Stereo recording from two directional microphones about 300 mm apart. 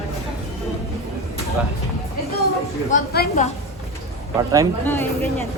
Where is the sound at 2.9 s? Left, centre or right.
Left.